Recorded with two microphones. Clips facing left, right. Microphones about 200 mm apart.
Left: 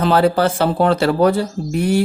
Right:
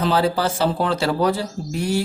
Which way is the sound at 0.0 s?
60° left (ahead or behind).